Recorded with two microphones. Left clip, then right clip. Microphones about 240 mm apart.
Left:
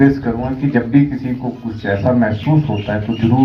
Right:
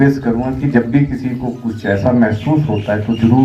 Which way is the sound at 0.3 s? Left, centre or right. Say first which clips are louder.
Right 2 dB; right.